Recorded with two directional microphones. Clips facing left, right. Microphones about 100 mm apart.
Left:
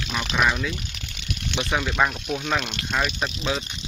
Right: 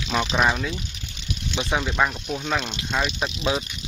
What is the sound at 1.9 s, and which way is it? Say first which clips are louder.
Speech: even; centre (ahead or behind).